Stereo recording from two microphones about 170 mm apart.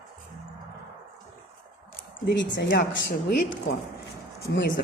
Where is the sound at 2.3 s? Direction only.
85° left.